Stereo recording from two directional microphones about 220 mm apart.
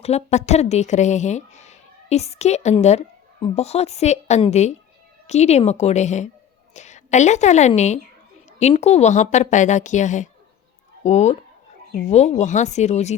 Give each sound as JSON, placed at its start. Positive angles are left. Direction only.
{"t": 0.0, "sound": "a woman's voice", "side_deg": 30}